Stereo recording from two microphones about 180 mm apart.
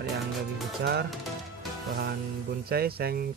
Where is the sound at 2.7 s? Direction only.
60° right (ahead or behind).